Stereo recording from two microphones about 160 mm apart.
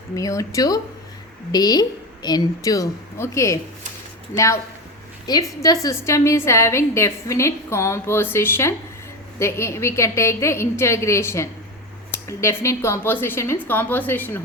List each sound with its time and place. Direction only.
0.2 s a woman's voice: 20° left (ahead or behind)